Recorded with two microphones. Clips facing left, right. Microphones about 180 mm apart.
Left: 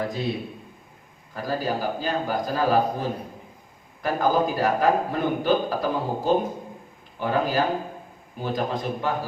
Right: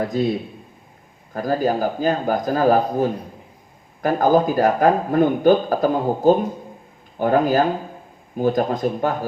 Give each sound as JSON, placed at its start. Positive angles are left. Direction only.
{"t": 1.3, "sound": "a man's voice", "side_deg": -50}